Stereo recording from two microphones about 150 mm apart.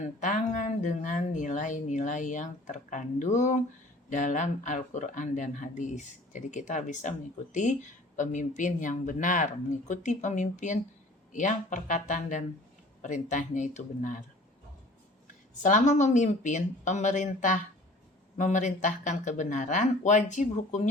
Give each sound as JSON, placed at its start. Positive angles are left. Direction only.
{"t": 0.0, "sound": "speech", "side_deg": 55}
{"t": 15.6, "sound": "speech", "side_deg": 55}